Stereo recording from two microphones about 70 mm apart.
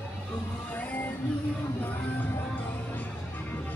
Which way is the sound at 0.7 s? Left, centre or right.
Left.